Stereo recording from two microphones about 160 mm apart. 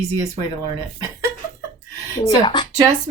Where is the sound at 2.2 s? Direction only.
30° left (ahead or behind).